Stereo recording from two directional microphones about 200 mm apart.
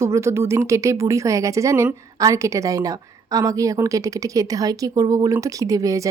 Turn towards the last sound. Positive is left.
turn(degrees=-15)  # may be behind; listen again after turning